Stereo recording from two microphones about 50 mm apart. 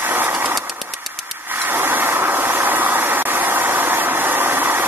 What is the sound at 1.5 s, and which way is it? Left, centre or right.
Vehicle, right.